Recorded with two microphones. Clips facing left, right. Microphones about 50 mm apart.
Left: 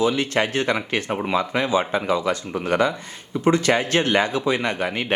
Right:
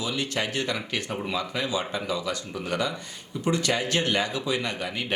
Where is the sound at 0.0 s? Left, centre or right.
Left.